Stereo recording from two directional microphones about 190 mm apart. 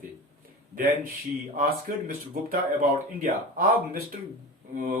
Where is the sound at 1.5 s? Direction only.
50° right (ahead or behind).